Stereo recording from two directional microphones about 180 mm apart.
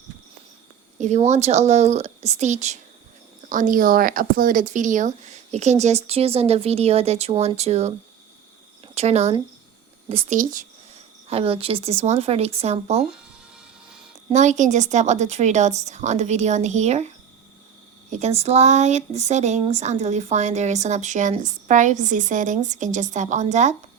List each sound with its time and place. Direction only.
0.9 s speech: 40° right (ahead or behind)
9.0 s speech: 35° right (ahead or behind)
10.3 s speech: 45° right (ahead or behind)
11.3 s speech: 30° right (ahead or behind)
14.3 s speech: 40° right (ahead or behind)
18.1 s speech: 40° right (ahead or behind)